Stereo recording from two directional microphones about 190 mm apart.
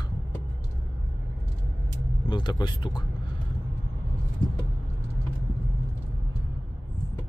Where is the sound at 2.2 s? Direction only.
25° left (ahead or behind).